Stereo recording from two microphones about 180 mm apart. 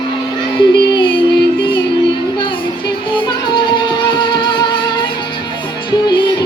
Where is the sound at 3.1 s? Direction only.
25° left (ahead or behind).